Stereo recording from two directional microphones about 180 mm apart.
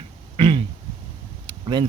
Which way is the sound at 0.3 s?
30° right (ahead or behind).